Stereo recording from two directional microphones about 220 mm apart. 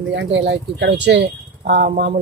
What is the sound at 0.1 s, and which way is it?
Speech, 55° right (ahead or behind).